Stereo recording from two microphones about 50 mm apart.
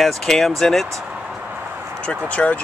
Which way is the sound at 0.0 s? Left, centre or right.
Centre.